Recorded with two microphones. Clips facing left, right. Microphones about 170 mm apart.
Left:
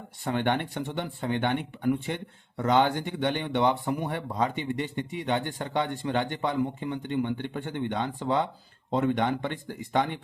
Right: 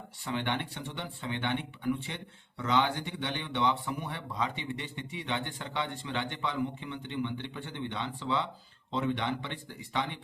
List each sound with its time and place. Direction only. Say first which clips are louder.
0.3 s speech: left 6 dB; 50° left (ahead or behind)